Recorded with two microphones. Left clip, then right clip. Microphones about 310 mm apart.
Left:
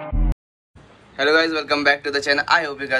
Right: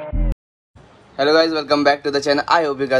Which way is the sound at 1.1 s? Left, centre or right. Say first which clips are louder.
Right 2 dB; centre.